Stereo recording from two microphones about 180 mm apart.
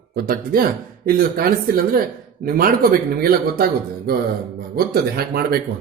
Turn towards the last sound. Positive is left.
turn(degrees=-60)  # may be behind; listen again after turning